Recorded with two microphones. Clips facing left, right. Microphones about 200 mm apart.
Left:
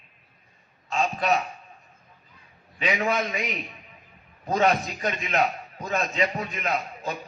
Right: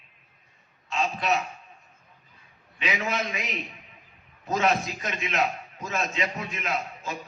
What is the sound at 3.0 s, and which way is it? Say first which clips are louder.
Speech: left 4 dB; 40° left (ahead or behind).